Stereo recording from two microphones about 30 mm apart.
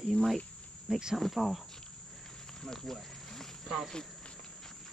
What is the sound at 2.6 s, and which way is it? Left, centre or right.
Insect, centre.